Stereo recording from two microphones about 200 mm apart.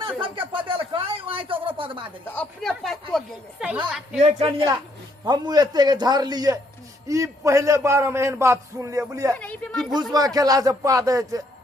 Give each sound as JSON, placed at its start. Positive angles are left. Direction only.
{"t": 0.5, "sound": "a sound", "side_deg": -25}
{"t": 2.2, "sound": "speech", "side_deg": 5}
{"t": 4.2, "sound": "a man's voice", "side_deg": -30}
{"t": 9.4, "sound": "a woman's voice", "side_deg": 5}
{"t": 9.9, "sound": "a man's voice", "side_deg": -20}